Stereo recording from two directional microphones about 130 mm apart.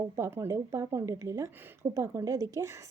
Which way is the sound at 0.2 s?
20° right (ahead or behind).